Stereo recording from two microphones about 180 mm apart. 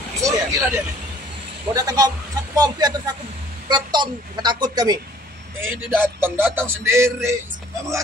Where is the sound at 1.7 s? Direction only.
20° right (ahead or behind).